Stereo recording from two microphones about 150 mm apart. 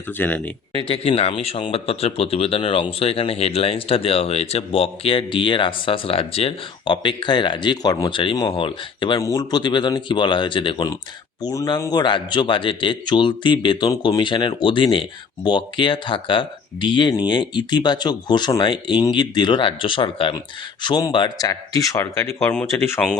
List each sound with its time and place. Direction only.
0.1 s speech: 10° left (ahead or behind)
0.9 s speech: 40° left (ahead or behind); by 22.9 s 15° left (ahead or behind)